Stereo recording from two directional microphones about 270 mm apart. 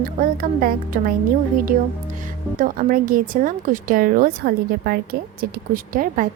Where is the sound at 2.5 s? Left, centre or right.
Right.